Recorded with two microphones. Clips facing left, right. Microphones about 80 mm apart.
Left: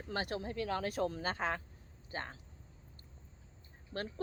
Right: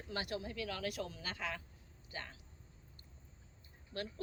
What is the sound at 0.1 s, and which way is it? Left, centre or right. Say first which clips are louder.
Speech: left 3 dB; left.